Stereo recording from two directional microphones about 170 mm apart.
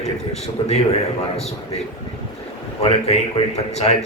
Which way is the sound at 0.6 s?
30° left (ahead or behind).